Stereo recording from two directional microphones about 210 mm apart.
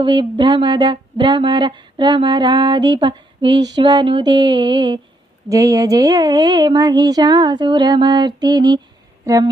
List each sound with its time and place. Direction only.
0.0 s speech: 20° right (ahead or behind)